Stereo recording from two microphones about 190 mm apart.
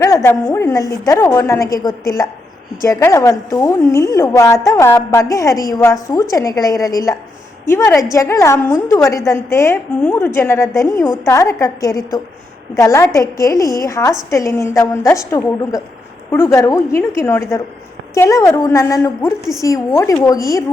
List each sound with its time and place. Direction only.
0.0 s a woman's voice: 15° left (ahead or behind)